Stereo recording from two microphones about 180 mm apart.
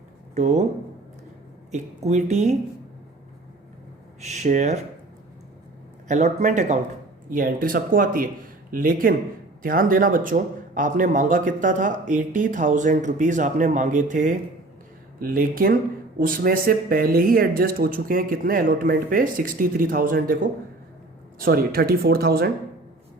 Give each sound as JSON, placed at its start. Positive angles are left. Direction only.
{"t": 0.3, "sound": "speech", "side_deg": -40}
{"t": 1.7, "sound": "speech", "side_deg": -40}
{"t": 4.2, "sound": "speech", "side_deg": -40}
{"t": 6.1, "sound": "speech", "side_deg": -45}